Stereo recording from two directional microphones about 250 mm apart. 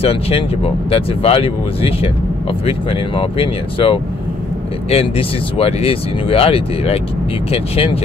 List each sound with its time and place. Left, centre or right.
0.0 s speech: left